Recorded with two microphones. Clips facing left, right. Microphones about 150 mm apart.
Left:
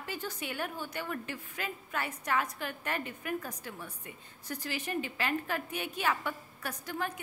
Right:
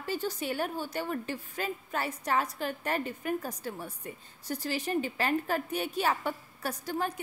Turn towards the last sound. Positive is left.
turn(degrees=-35)  # may be behind; listen again after turning